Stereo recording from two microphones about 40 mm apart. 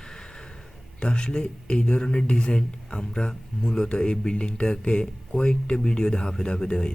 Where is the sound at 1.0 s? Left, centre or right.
Left.